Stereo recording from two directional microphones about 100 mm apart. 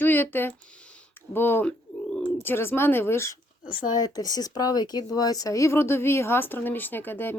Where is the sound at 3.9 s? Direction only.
40° left (ahead or behind).